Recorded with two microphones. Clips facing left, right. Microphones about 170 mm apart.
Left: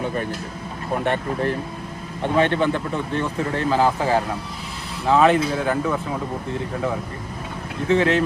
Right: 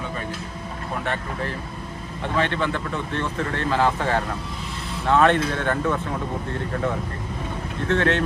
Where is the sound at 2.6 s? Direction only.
10° left (ahead or behind).